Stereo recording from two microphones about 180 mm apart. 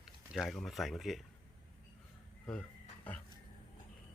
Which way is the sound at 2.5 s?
5° left (ahead or behind).